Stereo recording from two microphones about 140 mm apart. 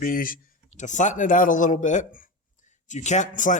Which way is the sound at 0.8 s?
60° left (ahead or behind).